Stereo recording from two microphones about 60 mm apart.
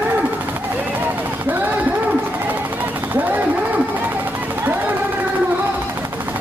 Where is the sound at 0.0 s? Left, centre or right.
Right.